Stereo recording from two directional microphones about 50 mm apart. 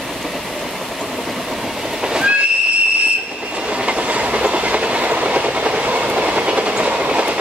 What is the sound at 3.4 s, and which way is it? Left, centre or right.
Train, right.